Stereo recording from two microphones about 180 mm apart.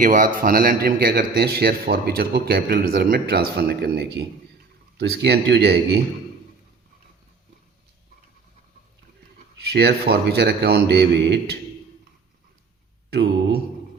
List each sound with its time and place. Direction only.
0.0 s a man's voice: 50° right (ahead or behind); by 6.0 s 65° right (ahead or behind)
9.6 s a man's voice: 65° right (ahead or behind)
13.1 s a man's voice: 65° right (ahead or behind)